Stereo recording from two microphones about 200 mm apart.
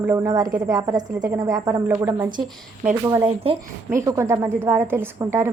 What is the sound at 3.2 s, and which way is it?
Speech, 30° right (ahead or behind).